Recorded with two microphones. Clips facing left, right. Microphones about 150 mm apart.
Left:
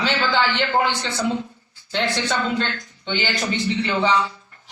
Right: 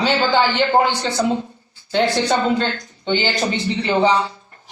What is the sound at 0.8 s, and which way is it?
A woman's voice, 35° right (ahead or behind).